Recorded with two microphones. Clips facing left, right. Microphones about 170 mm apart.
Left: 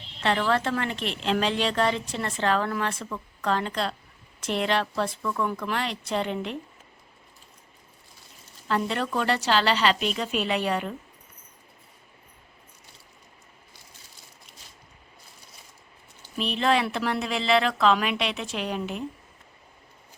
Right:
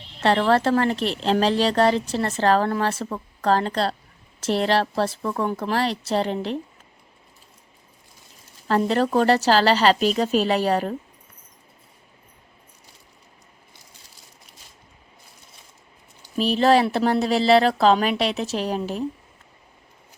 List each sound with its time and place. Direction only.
0.2 s a woman's voice: 35° right (ahead or behind)
8.6 s a woman's voice: 40° right (ahead or behind)
16.4 s a woman's voice: 35° right (ahead or behind)